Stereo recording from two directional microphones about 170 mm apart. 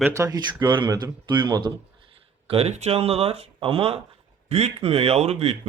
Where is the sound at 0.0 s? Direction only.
15° right (ahead or behind).